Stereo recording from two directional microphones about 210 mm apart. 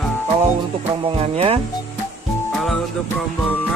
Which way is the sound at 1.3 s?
30° right (ahead or behind).